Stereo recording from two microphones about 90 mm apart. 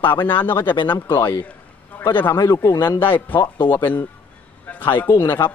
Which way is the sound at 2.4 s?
40° left (ahead or behind).